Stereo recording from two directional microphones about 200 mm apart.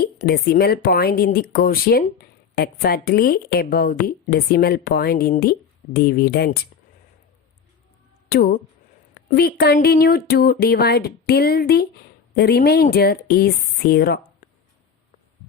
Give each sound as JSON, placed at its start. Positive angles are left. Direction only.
{"t": 0.0, "sound": "a woman's voice", "side_deg": 50}
{"t": 8.3, "sound": "a woman's voice", "side_deg": 45}